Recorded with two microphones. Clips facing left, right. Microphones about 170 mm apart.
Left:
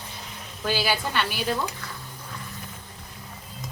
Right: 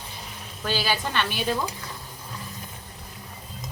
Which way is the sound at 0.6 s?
10° left (ahead or behind).